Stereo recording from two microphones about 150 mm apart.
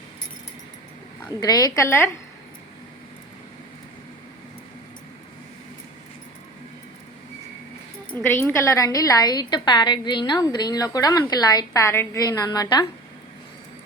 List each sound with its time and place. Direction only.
1.4 s a woman's voice: 25° left (ahead or behind)
8.1 s a woman's voice: 15° left (ahead or behind)